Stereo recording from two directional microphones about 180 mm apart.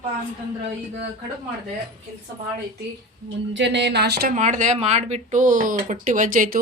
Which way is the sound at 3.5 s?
80° right.